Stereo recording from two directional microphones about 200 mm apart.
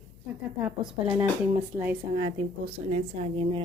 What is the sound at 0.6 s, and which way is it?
Speech, 5° right (ahead or behind).